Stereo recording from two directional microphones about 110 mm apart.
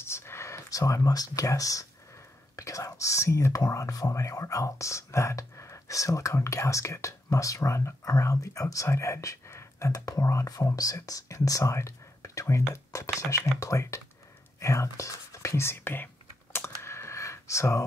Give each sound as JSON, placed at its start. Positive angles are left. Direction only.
{"t": 0.0, "sound": "speech", "side_deg": 20}
{"t": 16.5, "sound": "computer keyboard", "side_deg": 20}